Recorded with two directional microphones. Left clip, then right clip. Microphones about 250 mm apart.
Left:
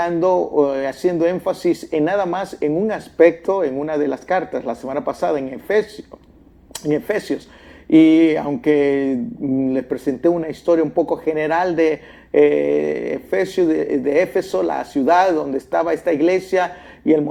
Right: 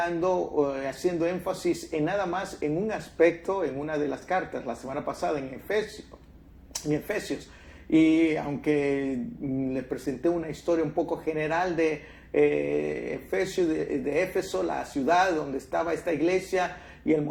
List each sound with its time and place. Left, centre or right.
0.0 s speech: left
6.8 s speech: left